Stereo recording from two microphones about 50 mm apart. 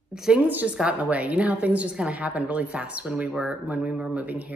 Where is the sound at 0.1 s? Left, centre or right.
Centre.